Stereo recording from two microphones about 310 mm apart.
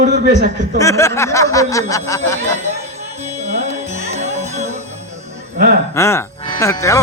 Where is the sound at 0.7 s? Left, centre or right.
Centre.